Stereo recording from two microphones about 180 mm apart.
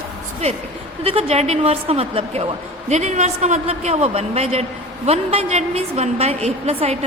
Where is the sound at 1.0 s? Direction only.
35° right (ahead or behind).